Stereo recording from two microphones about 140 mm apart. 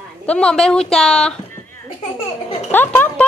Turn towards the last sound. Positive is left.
turn(degrees=15)  # may be behind; listen again after turning